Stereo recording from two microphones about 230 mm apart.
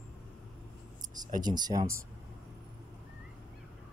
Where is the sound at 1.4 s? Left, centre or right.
Centre.